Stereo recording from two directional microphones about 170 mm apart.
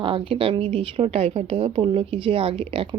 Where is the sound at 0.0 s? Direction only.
30° right (ahead or behind).